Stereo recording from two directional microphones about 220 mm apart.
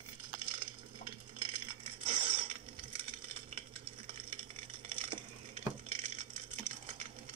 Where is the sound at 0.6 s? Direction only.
25° right (ahead or behind).